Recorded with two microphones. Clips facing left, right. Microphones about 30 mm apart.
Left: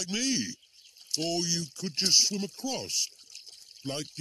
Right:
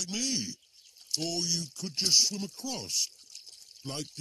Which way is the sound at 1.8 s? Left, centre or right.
Left.